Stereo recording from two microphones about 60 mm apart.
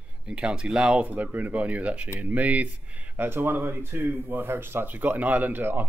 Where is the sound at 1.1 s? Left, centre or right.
Right.